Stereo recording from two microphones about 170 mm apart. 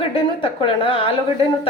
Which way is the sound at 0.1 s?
30° left (ahead or behind).